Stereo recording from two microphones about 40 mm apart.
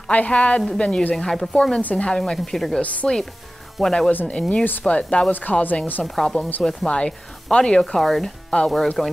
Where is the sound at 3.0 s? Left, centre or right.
Centre.